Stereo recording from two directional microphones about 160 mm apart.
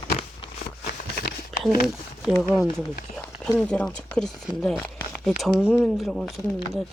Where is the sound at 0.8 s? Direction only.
65° left (ahead or behind).